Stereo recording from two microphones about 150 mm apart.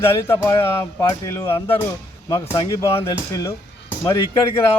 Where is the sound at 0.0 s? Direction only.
15° left (ahead or behind).